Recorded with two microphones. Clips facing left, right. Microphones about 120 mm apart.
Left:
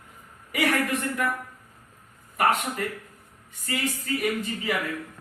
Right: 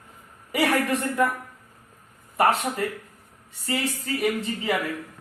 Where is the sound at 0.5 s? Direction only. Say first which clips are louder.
Right 2 dB; 30° right (ahead or behind).